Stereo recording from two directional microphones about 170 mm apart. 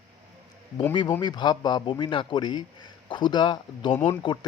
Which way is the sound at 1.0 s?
20° left (ahead or behind).